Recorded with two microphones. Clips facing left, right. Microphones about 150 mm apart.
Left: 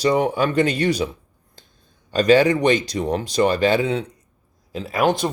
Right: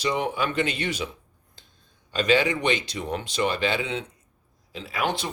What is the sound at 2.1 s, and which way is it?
Speech, 40° left (ahead or behind).